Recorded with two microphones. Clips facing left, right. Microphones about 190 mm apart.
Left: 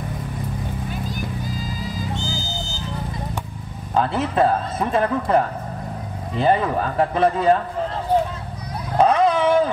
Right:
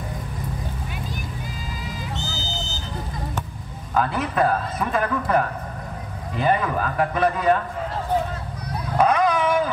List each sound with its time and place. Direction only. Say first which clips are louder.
3.9 s speech: left 2 dB; 25° left (ahead or behind)
8.9 s dog: left 3 dB; 30° left (ahead or behind)